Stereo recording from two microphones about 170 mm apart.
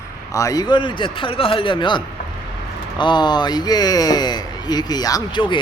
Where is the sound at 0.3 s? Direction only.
20° left (ahead or behind).